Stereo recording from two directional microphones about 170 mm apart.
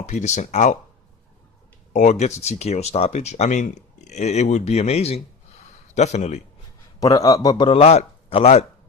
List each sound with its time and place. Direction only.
0.0 s speech: 45° left (ahead or behind)
1.9 s speech: 45° left (ahead or behind)
7.0 s speech: 20° left (ahead or behind); by 8.6 s 35° left (ahead or behind)